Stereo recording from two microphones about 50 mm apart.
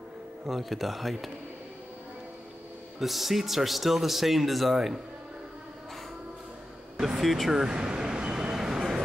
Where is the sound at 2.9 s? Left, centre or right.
Centre.